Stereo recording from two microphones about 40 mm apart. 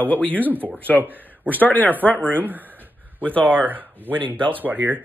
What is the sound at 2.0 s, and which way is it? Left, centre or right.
Speech, left.